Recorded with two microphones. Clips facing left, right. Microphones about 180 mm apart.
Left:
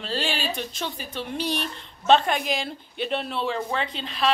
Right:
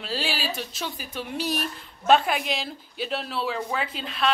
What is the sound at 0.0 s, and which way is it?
A woman's voice, 5° right (ahead or behind).